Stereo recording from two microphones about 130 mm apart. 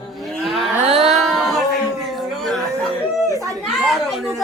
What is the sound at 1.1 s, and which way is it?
A woman's voice, centre (ahead or behind).